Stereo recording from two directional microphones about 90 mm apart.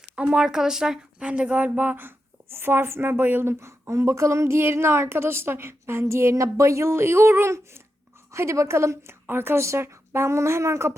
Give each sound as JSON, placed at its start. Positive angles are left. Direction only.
{"t": 0.2, "sound": "a woman's voice", "side_deg": -10}